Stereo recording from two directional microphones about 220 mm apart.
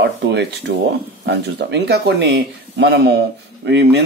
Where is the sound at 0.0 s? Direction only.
50° right (ahead or behind).